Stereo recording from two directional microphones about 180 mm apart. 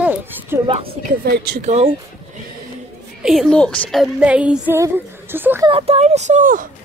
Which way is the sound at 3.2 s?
Centre (ahead or behind).